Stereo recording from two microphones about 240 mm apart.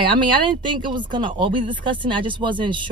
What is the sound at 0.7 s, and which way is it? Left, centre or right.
Speech, centre.